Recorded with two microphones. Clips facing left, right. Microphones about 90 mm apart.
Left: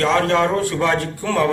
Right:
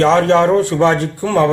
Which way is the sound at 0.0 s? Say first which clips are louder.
Right 6 dB; 25° right (ahead or behind).